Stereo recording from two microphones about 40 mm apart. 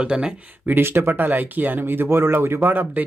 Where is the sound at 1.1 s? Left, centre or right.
Right.